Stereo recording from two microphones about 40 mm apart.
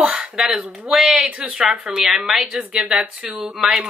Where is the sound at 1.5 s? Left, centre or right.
Right.